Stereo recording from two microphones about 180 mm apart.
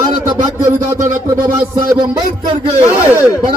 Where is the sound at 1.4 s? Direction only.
20° right (ahead or behind).